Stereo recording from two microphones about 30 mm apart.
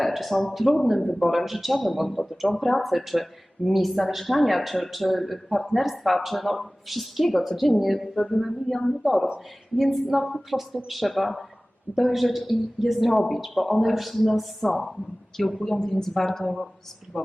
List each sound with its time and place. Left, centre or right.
0.1 s a woman's voice: centre
15.6 s a woman's voice: centre